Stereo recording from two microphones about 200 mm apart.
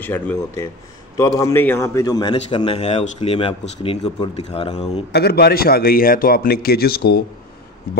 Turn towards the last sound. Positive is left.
turn(degrees=50)  # may be behind; listen again after turning